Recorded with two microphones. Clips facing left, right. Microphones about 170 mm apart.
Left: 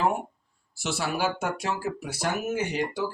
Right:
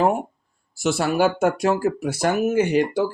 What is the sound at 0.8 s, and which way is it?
Speech, 50° right (ahead or behind).